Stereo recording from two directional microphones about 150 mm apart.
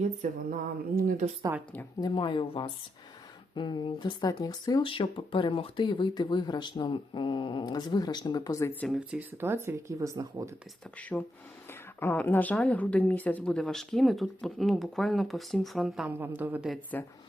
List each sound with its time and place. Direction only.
0.2 s a sound: 55° right (ahead or behind)
0.9 s speech: 60° right (ahead or behind)
1.5 s speech: 20° right (ahead or behind)
2.0 s speech: 30° left (ahead or behind)
8.9 s speech: 10° right (ahead or behind)
11.1 s speech: 5° left (ahead or behind)
16.1 s speech: 15° right (ahead or behind)
16.9 s speech: 10° left (ahead or behind)